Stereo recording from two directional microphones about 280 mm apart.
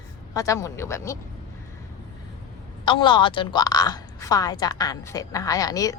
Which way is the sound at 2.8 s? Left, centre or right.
Centre.